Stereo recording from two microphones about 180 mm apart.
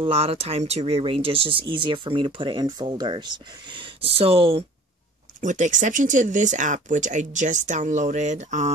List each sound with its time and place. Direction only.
0.0 s speech: 35° right (ahead or behind)
5.4 s speech: 45° right (ahead or behind)